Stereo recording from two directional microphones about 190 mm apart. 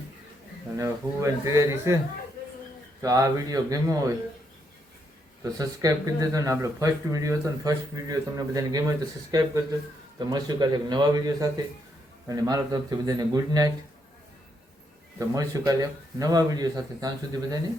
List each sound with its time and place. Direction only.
0.8 s speech: 15° right (ahead or behind)
3.0 s speech: 15° right (ahead or behind)
5.4 s speech: 20° right (ahead or behind)
15.2 s speech: 20° right (ahead or behind)